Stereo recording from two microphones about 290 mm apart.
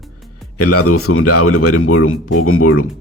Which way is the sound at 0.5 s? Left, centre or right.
Left.